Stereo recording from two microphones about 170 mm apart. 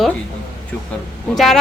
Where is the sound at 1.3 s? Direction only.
Centre (ahead or behind).